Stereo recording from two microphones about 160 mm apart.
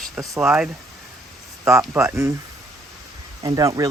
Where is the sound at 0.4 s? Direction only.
5° right (ahead or behind).